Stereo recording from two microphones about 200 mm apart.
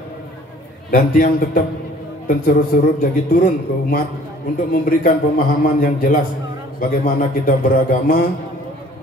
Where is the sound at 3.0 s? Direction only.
45° left (ahead or behind).